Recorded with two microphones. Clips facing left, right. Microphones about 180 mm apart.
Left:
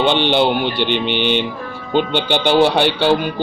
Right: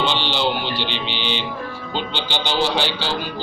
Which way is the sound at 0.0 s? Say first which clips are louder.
Left 7 dB; 55° left (ahead or behind).